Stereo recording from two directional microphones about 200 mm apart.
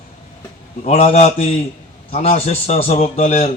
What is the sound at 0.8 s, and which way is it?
A man's voice, 30° left (ahead or behind).